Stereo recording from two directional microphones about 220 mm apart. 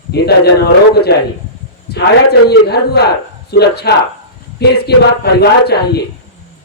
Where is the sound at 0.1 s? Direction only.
45° left (ahead or behind).